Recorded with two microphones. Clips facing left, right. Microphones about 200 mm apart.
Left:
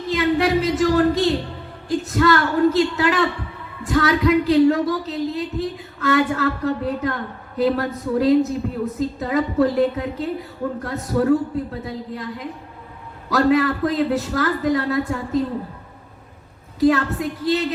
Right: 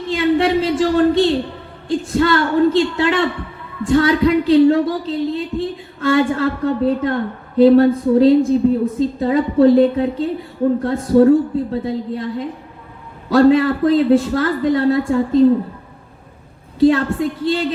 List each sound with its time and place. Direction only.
0.1 s speech: 30° right (ahead or behind)
13.3 s speech: 30° right (ahead or behind)
16.8 s speech: 30° right (ahead or behind)